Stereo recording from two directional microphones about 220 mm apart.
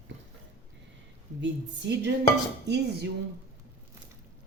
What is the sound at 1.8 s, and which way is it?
Speech, 50° right (ahead or behind).